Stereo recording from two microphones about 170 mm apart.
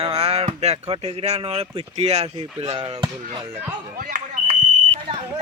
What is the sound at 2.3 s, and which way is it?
Speech, 30° right (ahead or behind).